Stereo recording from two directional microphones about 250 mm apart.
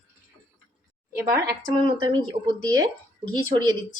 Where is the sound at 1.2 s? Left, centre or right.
Centre.